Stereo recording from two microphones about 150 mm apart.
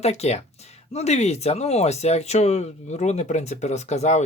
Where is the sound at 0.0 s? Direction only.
45° left (ahead or behind).